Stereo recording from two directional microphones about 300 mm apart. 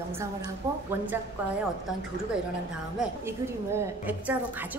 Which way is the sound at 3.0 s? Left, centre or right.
Centre.